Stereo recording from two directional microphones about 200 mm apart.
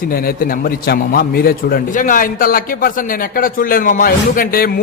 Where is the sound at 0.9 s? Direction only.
50° left (ahead or behind).